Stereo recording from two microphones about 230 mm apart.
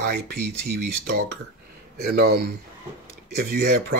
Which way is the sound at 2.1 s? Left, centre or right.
Right.